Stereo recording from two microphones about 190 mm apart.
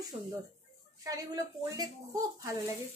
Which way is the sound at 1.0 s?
20° right (ahead or behind).